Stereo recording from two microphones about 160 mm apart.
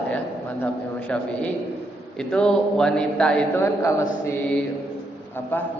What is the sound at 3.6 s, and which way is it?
A man's voice, 20° left (ahead or behind).